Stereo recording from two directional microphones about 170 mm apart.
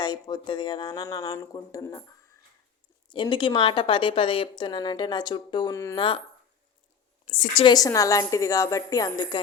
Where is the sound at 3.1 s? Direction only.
30° left (ahead or behind).